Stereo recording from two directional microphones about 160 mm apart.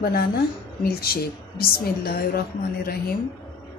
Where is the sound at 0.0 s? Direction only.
70° left (ahead or behind).